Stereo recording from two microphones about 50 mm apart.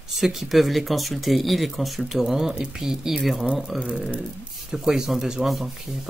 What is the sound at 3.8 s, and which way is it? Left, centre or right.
Speech, centre.